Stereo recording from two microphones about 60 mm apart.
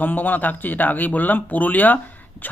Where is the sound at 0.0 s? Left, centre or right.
Left.